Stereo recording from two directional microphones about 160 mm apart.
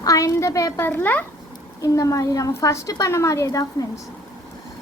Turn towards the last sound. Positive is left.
turn(degrees=20)  # may be behind; listen again after turning